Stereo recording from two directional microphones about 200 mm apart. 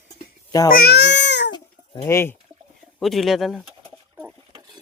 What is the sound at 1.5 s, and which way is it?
Chicken, 15° left (ahead or behind).